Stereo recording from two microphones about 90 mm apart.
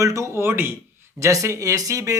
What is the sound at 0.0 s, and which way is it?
A man's voice, 35° right (ahead or behind).